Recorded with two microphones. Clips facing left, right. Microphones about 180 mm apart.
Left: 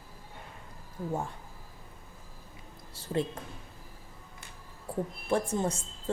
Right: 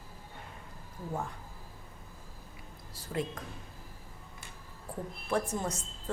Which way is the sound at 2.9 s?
30° left (ahead or behind).